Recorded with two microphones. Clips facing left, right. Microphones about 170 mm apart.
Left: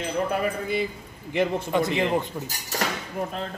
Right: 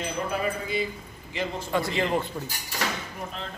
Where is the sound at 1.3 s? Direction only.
60° left (ahead or behind).